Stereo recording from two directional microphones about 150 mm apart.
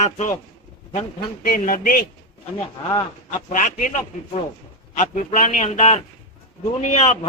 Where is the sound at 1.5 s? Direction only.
60° left (ahead or behind).